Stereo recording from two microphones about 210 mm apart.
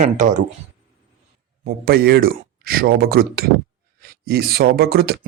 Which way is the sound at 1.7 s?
45° right (ahead or behind).